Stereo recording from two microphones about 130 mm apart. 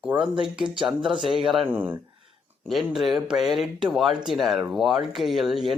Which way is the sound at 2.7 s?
Centre (ahead or behind).